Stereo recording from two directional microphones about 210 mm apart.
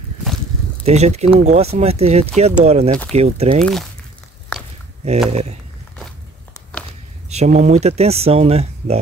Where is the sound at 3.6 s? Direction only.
Centre (ahead or behind).